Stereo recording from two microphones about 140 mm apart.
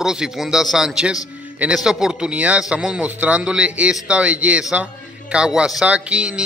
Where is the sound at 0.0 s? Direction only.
5° right (ahead or behind).